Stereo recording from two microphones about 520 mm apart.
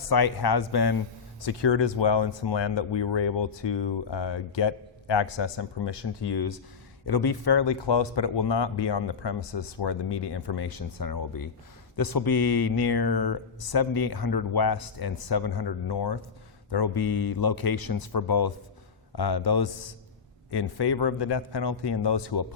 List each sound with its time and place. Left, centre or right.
0.1 s speech: left